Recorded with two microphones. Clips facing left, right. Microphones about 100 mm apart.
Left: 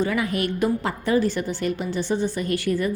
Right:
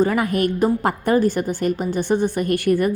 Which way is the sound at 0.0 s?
45° right (ahead or behind).